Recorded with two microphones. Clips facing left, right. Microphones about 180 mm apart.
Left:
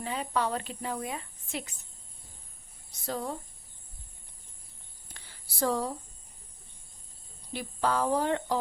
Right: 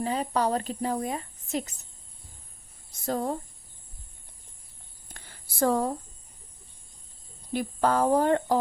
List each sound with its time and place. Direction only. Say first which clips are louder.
0.0 s a woman's voice: right 4 dB; 40° right (ahead or behind)
2.9 s speech: right 6 dB; 45° right (ahead or behind)
5.1 s a sound: right 5 dB; 50° right (ahead or behind)
7.5 s speech: right 5 dB; 50° right (ahead or behind)